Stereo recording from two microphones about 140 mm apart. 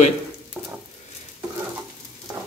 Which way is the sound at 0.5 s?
15° right (ahead or behind).